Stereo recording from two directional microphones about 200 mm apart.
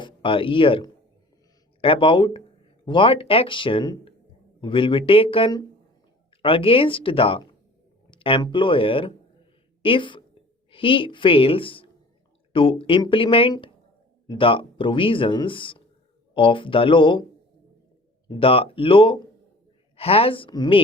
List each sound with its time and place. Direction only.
0.0 s speech: 25° left (ahead or behind)
18.3 s speech: 25° left (ahead or behind)